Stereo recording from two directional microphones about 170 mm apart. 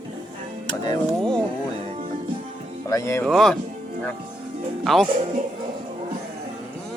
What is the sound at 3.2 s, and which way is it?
Speech, centre (ahead or behind).